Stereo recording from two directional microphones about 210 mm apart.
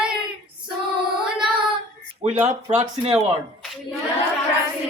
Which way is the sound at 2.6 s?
30° right (ahead or behind).